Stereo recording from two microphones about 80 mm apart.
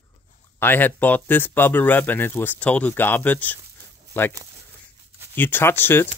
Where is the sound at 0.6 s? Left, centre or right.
Left.